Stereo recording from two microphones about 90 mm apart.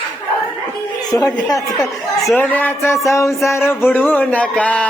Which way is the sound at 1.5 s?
40° left (ahead or behind).